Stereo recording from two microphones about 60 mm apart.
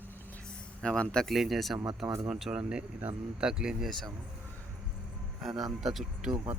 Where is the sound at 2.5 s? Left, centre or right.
Centre.